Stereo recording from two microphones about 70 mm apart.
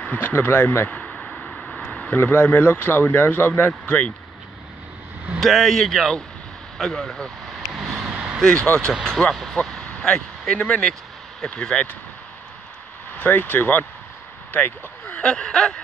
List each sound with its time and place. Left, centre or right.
0.0 s a sound: left
0.3 s speech: left
1.1 s a sound: centre
2.1 s speech: centre
5.4 s speech: centre
8.0 s vehicle: centre
8.4 s speech: centre
13.2 s speech: left